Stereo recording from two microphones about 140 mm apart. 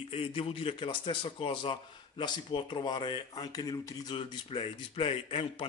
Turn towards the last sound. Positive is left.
turn(degrees=40)  # may be behind; listen again after turning